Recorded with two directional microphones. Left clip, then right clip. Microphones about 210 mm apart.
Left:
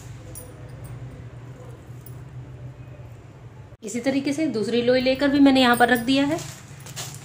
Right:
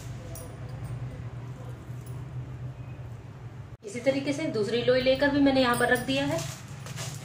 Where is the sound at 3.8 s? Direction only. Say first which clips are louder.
Left 2 dB; 50° left (ahead or behind).